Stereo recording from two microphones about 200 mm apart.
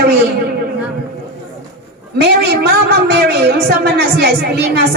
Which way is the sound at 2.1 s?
55° right (ahead or behind).